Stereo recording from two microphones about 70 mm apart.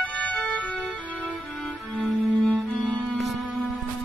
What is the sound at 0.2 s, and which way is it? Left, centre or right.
Music, centre.